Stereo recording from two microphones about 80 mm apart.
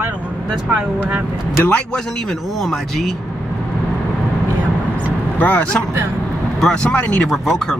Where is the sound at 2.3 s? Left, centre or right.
Centre.